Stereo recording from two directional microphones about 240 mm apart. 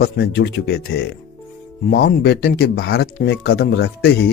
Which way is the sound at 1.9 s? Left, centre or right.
Left.